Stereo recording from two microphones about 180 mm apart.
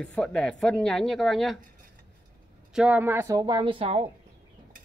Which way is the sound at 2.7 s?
5° right (ahead or behind).